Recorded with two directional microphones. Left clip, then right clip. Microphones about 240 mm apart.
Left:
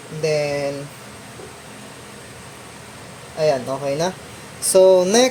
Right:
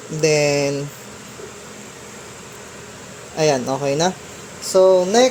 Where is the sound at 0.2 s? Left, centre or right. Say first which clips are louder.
Right 4 dB; right.